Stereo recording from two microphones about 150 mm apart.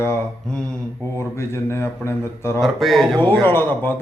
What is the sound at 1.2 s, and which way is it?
A man's voice, 20° left (ahead or behind).